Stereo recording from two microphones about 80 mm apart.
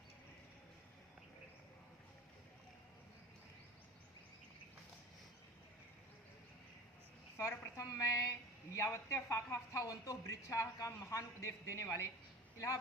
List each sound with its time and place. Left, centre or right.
7.3 s speech: left